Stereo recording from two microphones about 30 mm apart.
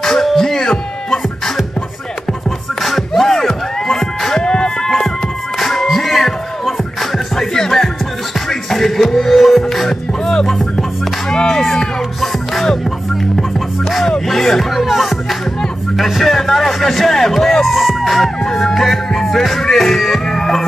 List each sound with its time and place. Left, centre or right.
0.0 s music: centre
2.8 s music: centre
4.5 s a sound: left
5.9 s music: centre
7.3 s music: centre
9.8 s music: centre
11.2 s speech: left
13.4 s music: centre
14.2 s speech: centre
18.4 s music: centre